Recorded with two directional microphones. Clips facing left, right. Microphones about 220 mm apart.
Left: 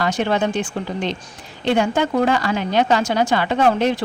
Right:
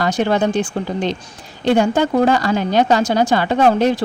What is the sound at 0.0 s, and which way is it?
Speech, 40° right (ahead or behind).